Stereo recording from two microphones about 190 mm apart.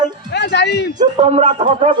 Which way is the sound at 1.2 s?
30° right (ahead or behind).